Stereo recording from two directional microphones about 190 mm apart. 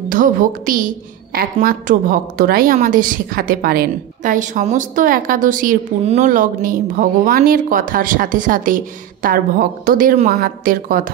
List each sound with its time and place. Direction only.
0.1 s a woman's voice: 45° right (ahead or behind)